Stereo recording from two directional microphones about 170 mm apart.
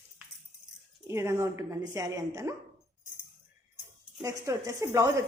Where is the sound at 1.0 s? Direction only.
15° right (ahead or behind).